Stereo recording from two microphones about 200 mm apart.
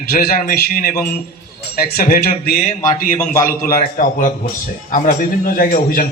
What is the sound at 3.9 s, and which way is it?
A man's voice, 40° left (ahead or behind).